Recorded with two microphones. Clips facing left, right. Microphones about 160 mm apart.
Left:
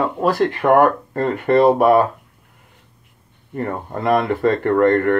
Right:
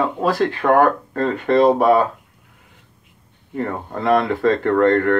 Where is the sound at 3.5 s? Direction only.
5° left (ahead or behind).